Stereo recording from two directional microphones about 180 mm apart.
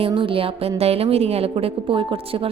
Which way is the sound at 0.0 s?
30° right (ahead or behind).